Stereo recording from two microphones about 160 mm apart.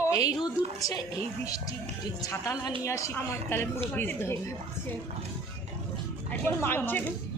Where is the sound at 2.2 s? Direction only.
20° left (ahead or behind).